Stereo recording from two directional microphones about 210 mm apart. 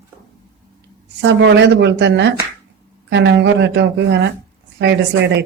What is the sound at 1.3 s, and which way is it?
Speech, 55° right (ahead or behind).